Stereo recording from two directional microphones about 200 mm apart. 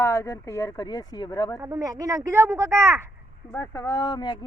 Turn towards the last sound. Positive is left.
turn(degrees=20)  # may be behind; listen again after turning